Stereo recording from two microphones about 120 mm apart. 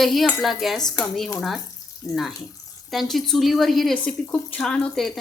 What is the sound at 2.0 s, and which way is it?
Speech, 15° left (ahead or behind).